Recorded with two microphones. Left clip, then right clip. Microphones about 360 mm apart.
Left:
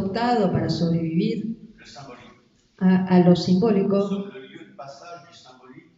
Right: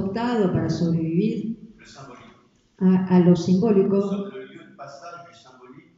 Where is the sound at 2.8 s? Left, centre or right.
Centre.